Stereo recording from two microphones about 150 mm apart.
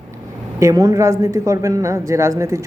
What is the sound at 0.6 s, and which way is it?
Speech, 25° right (ahead or behind).